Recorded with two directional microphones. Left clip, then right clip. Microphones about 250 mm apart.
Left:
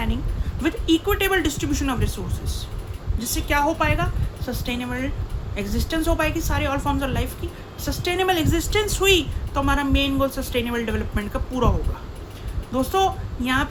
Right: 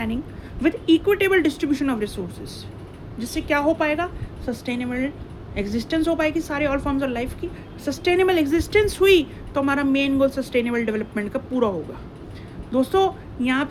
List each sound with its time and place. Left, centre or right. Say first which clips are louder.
0.6 s speech: right 3 dB; centre
3.2 s speech: left 1 dB; centre
12.7 s speech: right 1 dB; centre